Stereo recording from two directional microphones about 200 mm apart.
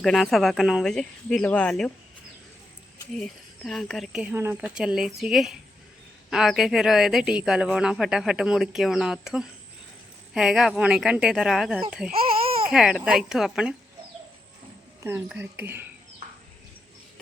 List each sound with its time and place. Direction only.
0.0 s speech: centre (ahead or behind)
3.2 s speech: centre (ahead or behind)
15.0 s speech: 10° right (ahead or behind)